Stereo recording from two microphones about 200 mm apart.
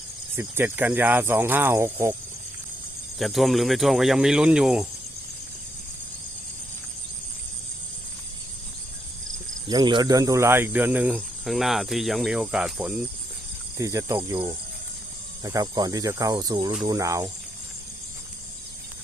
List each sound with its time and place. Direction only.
0.3 s cricket: 10° right (ahead or behind)
3.2 s speech: centre (ahead or behind)
9.6 s cricket: 20° right (ahead or behind); by 13.1 s 5° right (ahead or behind)
13.7 s cricket: 15° right (ahead or behind)
15.4 s speech: 20° right (ahead or behind)
16.8 s cricket: 15° right (ahead or behind)